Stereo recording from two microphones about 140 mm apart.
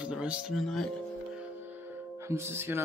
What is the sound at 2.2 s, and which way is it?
Speech, 20° right (ahead or behind).